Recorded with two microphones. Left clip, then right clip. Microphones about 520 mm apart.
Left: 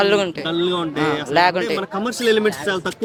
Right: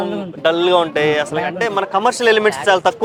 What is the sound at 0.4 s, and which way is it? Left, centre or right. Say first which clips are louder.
Speech: right 8 dB; right.